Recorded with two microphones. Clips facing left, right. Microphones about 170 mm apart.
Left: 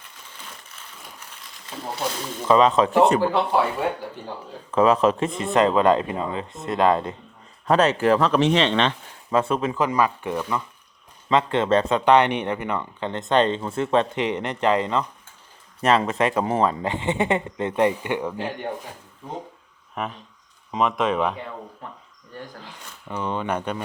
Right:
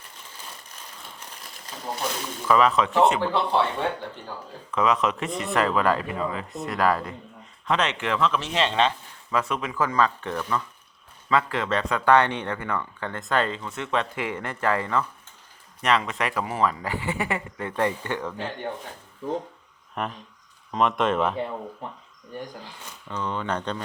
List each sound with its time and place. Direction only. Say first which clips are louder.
2.5 s speech: left 4 dB; 25° left (ahead or behind)
3.5 s speech: left 2 dB; 5° left (ahead or behind)
4.7 s speech: left 6 dB; 30° left (ahead or behind)
7.7 s speech: left 7 dB; 35° left (ahead or behind)
8.4 s speech: left 3 dB; 75° left (ahead or behind)
9.3 s speech: left 5 dB; 30° left (ahead or behind)
9.7 s speech: left 2 dB; 15° left (ahead or behind); by 14.1 s 30° left (ahead or behind)
14.2 s speech: left 5 dB; 20° left (ahead or behind)
15.8 s speech: left 5 dB; 30° left (ahead or behind); by 18.7 s 15° left (ahead or behind)
20.0 s speech: left 1 dB; centre (ahead or behind)
22.3 s speech: right 2 dB; 15° right (ahead or behind)
23.0 s speech: left 3 dB; 15° left (ahead or behind)